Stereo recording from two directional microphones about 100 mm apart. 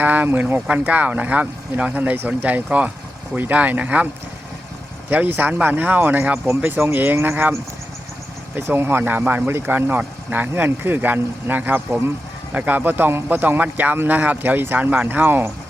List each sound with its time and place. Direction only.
0.0 s speech: 15° right (ahead or behind)
8.5 s speech: 25° right (ahead or behind)